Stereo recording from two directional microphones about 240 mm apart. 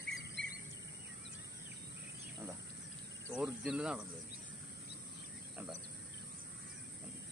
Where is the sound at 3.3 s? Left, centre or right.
Centre.